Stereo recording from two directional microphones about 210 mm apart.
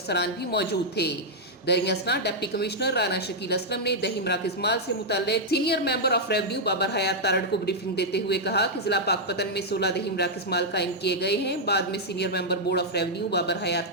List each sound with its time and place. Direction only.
0.1 s a woman's voice: 50° left (ahead or behind)